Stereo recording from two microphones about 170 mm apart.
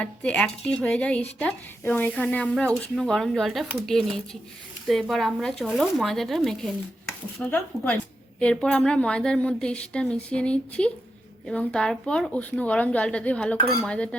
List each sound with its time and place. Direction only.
0.0 s speech: 5° left (ahead or behind)